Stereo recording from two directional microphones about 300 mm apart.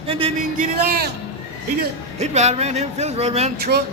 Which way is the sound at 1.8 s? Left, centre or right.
Right.